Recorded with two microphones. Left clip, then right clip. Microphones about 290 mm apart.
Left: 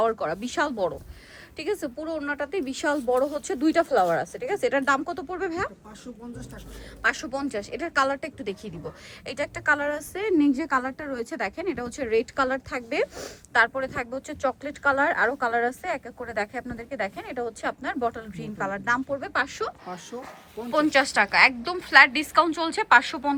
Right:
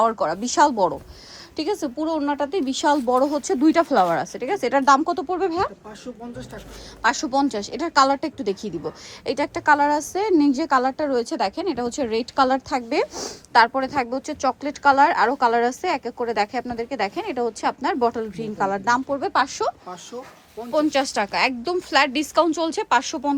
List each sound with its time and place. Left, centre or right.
0.2 s a woman's voice: centre
2.9 s speech: right
3.4 s a woman's voice: centre
7.0 s a woman's voice: centre